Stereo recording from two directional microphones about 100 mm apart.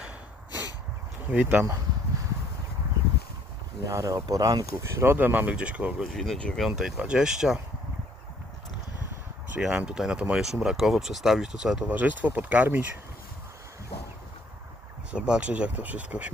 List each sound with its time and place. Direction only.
1.3 s speech: 15° right (ahead or behind)
3.8 s speech: 35° right (ahead or behind)
5.1 s speech: 15° right (ahead or behind)
6.1 s speech: 5° left (ahead or behind)
6.7 s speech: 5° right (ahead or behind)
9.5 s speech: 10° right (ahead or behind)
13.9 s a sound: 90° left
15.1 s speech: 10° right (ahead or behind)